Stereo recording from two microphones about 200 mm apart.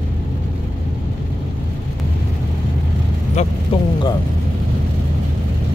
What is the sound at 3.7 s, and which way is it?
Speech, 25° left (ahead or behind).